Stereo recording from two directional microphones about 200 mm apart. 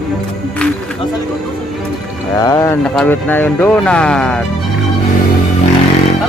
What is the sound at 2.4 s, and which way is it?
Speech, 15° left (ahead or behind).